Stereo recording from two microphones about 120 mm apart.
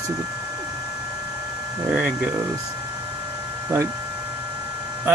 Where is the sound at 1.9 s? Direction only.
15° right (ahead or behind).